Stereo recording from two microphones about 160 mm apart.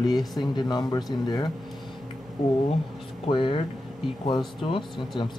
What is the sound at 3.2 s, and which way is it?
Speech, 30° left (ahead or behind).